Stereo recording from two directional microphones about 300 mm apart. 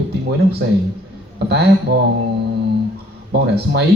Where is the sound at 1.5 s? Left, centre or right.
Right.